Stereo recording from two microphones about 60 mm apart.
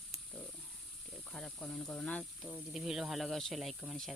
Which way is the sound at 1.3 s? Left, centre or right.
Centre.